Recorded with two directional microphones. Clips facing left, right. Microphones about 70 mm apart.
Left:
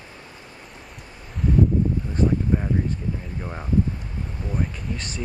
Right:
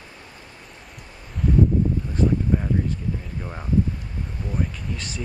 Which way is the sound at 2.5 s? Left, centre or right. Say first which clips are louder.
Even; centre.